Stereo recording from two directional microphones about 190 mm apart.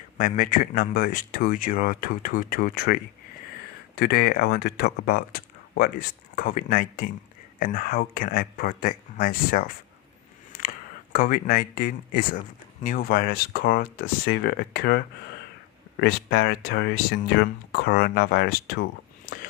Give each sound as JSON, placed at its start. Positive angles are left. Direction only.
{"t": 0.2, "sound": "speech", "side_deg": 45}
{"t": 10.5, "sound": "a sound", "side_deg": 55}
{"t": 11.1, "sound": "speech", "side_deg": 50}